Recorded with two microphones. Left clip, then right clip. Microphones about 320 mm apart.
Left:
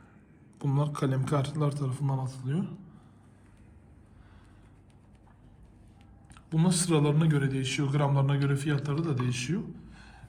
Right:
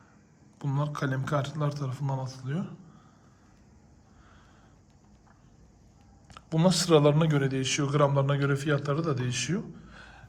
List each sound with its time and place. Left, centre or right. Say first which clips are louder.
0.6 s a man's voice: left 1 dB; centre
6.3 s a man's voice: right 5 dB; centre